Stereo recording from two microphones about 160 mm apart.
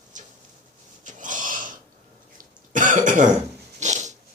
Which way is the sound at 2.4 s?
55° right (ahead or behind).